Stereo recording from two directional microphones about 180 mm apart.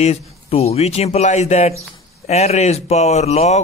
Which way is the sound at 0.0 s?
35° left (ahead or behind).